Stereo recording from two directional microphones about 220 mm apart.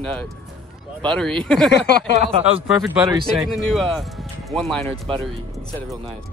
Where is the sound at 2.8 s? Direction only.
5° right (ahead or behind).